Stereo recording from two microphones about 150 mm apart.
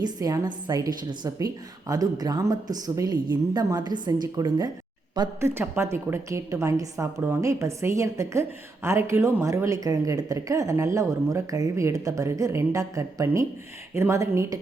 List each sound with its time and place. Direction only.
0.0 s a woman's voice: 25° right (ahead or behind)
5.4 s a woman's voice: 15° right (ahead or behind)